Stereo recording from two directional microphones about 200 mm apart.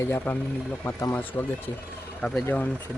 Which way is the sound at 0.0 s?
10° left (ahead or behind).